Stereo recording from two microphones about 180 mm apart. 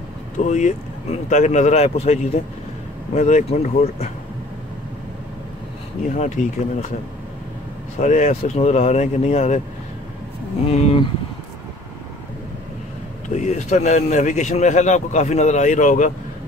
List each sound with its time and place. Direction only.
0.4 s a man's voice: 40° left (ahead or behind)
6.1 s a man's voice: 40° left (ahead or behind)
8.0 s a man's voice: 40° left (ahead or behind)
10.7 s a man's voice: 35° left (ahead or behind)
13.3 s a man's voice: 40° left (ahead or behind)